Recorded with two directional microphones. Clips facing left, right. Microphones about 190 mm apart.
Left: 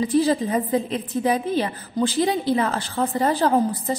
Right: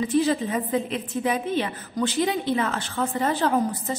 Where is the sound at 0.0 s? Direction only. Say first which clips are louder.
Left 2 dB; 35° left (ahead or behind).